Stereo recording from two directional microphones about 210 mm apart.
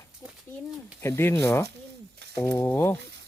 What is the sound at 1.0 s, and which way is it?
Speech, 10° left (ahead or behind).